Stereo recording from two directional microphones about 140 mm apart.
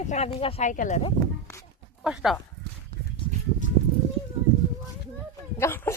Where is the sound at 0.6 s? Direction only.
65° left (ahead or behind).